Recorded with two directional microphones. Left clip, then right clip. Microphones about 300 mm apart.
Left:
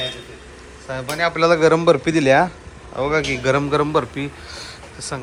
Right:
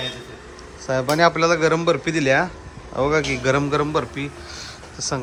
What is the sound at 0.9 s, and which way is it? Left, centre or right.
Speech, centre.